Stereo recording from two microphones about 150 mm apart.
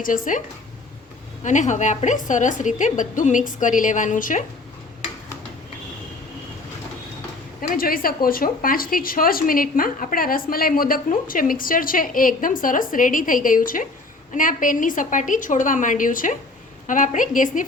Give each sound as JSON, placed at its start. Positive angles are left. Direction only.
{"t": 0.0, "sound": "a woman's voice", "side_deg": 65}
{"t": 1.5, "sound": "a woman's voice", "side_deg": 55}
{"t": 7.7, "sound": "a woman's voice", "side_deg": 70}